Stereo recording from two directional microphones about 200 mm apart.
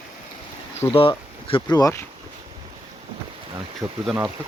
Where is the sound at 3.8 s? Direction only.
15° right (ahead or behind).